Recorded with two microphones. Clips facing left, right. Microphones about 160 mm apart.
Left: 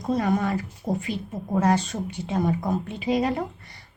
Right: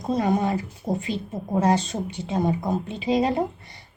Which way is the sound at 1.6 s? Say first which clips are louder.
Right 1 dB; 20° right (ahead or behind).